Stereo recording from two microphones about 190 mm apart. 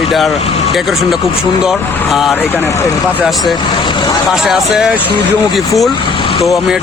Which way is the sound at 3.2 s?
Centre (ahead or behind).